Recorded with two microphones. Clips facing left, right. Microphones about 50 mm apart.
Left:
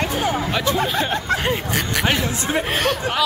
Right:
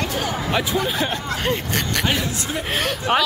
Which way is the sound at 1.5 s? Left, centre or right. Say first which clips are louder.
Left 1 dB; centre.